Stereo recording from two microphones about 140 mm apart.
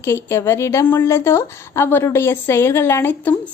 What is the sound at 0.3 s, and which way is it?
A woman's voice, 20° left (ahead or behind).